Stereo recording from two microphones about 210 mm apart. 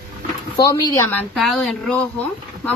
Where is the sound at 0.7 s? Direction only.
15° left (ahead or behind).